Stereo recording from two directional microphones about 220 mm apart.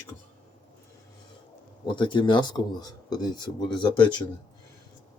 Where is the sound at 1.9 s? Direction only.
20° left (ahead or behind).